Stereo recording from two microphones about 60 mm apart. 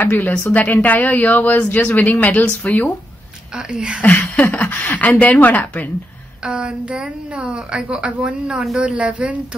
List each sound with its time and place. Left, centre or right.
0.0 s a woman's voice: left
3.5 s a woman's voice: centre
4.0 s speech: left
6.4 s a woman's voice: centre